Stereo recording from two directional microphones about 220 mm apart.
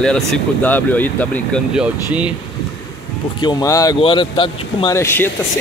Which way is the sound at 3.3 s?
20° left (ahead or behind).